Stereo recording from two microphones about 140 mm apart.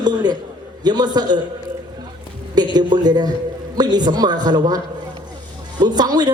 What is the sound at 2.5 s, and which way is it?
A woman's voice, 30° right (ahead or behind).